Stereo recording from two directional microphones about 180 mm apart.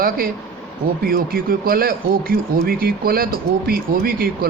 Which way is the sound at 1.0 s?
55° right (ahead or behind).